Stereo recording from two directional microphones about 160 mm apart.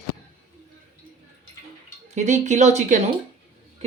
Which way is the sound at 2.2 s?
50° right (ahead or behind).